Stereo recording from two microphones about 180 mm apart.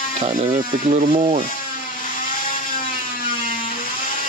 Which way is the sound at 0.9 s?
35° right (ahead or behind).